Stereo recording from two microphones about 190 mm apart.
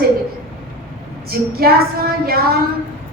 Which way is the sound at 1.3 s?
55° right (ahead or behind).